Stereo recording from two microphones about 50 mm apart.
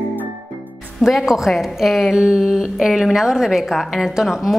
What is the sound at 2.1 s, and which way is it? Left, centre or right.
A woman's voice, centre.